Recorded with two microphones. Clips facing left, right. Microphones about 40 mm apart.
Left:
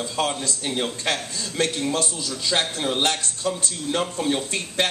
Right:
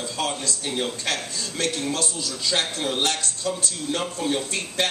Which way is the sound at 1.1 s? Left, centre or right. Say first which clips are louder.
Left 2 dB; left.